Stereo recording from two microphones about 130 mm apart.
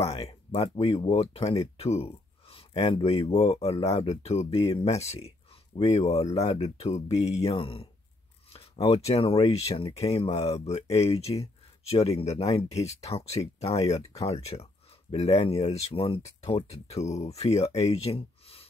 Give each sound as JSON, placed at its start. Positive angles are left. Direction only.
{"t": 0.0, "sound": "speech", "side_deg": 50}